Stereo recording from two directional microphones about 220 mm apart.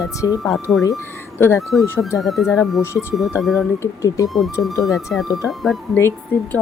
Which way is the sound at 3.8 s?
15° left (ahead or behind).